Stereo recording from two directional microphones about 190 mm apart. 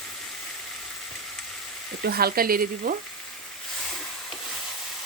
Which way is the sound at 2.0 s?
55° right (ahead or behind).